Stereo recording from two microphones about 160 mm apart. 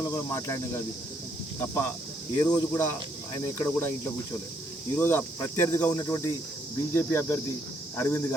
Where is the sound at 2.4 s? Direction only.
15° left (ahead or behind).